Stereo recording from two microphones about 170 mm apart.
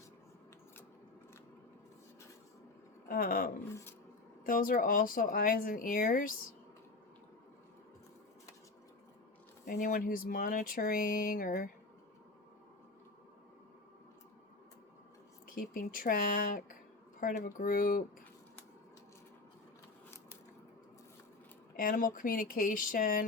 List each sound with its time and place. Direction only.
3.1 s speech: 60° left (ahead or behind)
9.6 s speech: 55° left (ahead or behind)
15.4 s speech: 55° left (ahead or behind)
21.8 s speech: 55° left (ahead or behind)